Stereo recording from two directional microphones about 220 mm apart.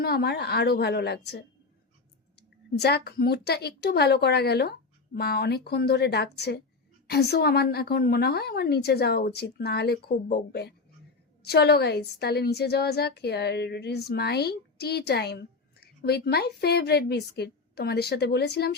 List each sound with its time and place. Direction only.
0.0 s a woman's voice: 45° left (ahead or behind)
2.8 s a woman's voice: 50° left (ahead or behind)